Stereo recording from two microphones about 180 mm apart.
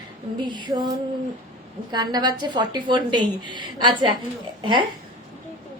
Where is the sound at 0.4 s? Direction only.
25° right (ahead or behind).